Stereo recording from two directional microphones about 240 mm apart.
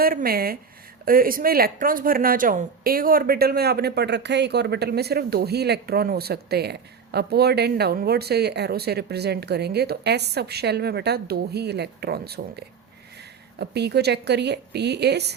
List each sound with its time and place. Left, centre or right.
0.0 s a woman's voice: right